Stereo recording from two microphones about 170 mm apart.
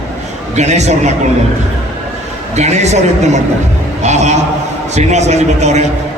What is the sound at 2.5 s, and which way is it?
Speech, 40° right (ahead or behind).